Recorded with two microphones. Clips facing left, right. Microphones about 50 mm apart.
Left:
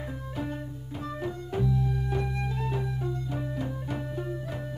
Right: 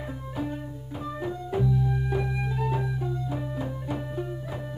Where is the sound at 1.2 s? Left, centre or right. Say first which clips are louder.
Right 3 dB; centre.